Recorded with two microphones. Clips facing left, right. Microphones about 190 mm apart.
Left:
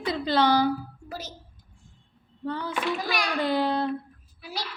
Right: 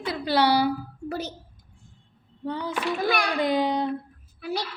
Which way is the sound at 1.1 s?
60° right (ahead or behind).